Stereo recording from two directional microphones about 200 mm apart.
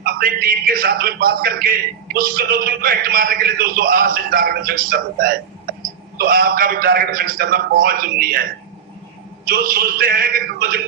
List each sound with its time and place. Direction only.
0.0 s a man's voice: 45° right (ahead or behind)
9.5 s a man's voice: 45° right (ahead or behind)